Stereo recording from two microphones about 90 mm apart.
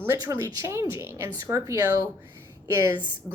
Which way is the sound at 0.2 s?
30° right (ahead or behind).